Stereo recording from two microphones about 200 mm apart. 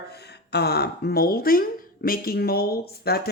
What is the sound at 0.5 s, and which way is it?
Speech, 55° left (ahead or behind).